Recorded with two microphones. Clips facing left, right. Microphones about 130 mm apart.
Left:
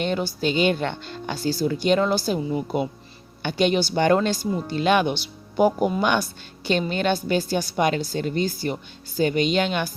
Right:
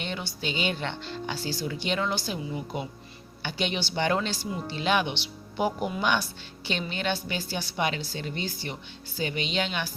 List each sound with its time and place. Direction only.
0.0 s speech: 45° left (ahead or behind)
3.4 s speech: 45° left (ahead or behind)